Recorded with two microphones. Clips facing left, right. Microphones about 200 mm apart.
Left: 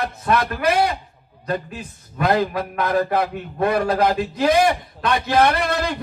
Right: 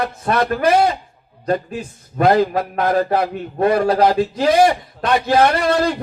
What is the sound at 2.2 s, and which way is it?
Speech, 45° right (ahead or behind).